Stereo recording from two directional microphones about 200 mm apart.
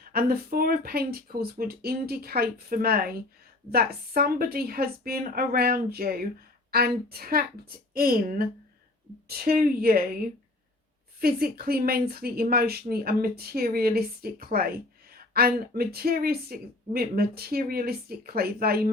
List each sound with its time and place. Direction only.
0.0 s speech: 50° right (ahead or behind)
11.2 s speech: 50° right (ahead or behind)